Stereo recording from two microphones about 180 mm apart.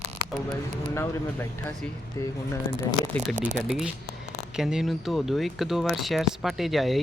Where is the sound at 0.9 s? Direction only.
15° left (ahead or behind).